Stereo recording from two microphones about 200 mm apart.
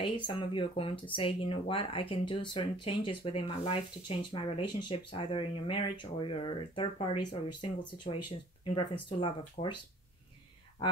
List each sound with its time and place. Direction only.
0.0 s speech: 25° left (ahead or behind)